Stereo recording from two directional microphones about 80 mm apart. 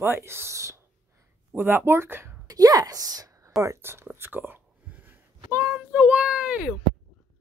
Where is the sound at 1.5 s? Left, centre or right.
Right.